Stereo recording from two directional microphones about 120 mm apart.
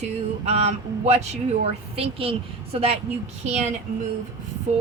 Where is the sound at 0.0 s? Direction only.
60° right (ahead or behind).